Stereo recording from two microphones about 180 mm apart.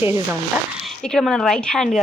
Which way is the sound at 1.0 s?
5° left (ahead or behind).